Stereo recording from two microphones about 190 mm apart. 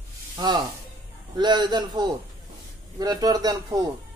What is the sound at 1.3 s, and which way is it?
Speech, 25° right (ahead or behind).